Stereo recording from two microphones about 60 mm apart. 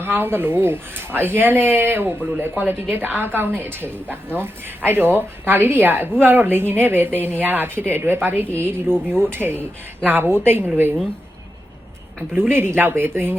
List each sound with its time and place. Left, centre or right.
0.0 s a woman's voice: right
12.4 s a woman's voice: right